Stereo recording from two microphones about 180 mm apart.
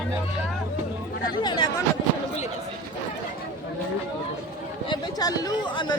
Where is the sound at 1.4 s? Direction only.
25° left (ahead or behind).